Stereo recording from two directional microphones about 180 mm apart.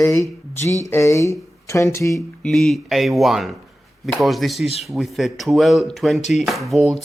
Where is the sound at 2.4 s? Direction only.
Centre (ahead or behind).